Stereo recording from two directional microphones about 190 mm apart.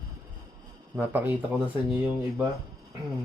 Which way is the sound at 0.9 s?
10° right (ahead or behind).